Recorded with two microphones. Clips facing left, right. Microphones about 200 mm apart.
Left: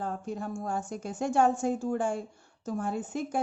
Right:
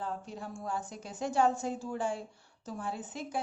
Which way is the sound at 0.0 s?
45° left (ahead or behind).